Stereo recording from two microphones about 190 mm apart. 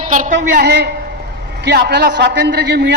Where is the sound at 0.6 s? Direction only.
60° right (ahead or behind).